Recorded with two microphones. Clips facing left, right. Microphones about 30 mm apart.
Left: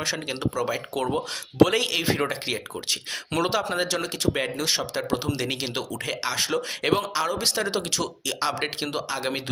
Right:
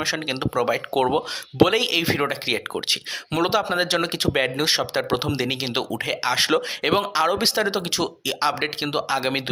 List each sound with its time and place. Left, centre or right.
0.0 s speech: right
1.7 s speech: centre
2.5 s speech: right
3.3 s speech: centre
3.8 s speech: right
5.4 s speech: right
6.3 s speech: right
6.8 s speech: right